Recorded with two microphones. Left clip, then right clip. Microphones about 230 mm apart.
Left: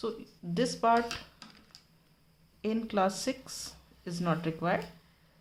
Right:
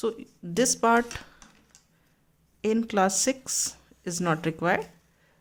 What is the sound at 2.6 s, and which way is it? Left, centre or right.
Speech, right.